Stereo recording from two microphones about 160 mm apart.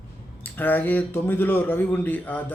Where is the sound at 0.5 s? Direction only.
10° left (ahead or behind).